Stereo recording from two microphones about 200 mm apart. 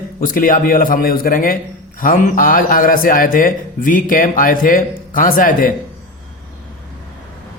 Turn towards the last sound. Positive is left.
turn(degrees=45)  # may be behind; listen again after turning